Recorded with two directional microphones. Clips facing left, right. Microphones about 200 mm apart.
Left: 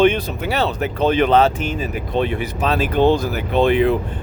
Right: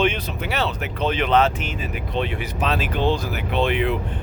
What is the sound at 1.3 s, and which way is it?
Speech, 35° left (ahead or behind).